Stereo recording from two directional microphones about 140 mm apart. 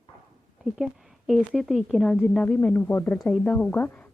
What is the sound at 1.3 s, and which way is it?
A woman's voice, centre (ahead or behind).